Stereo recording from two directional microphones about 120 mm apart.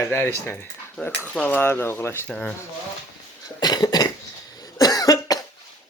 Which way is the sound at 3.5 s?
35° left (ahead or behind).